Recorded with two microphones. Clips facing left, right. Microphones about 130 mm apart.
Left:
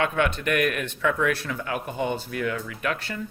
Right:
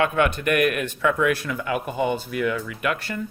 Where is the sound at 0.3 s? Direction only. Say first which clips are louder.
Right 3 dB; 50° right (ahead or behind).